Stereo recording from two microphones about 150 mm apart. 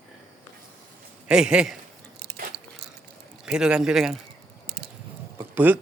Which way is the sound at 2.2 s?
80° right.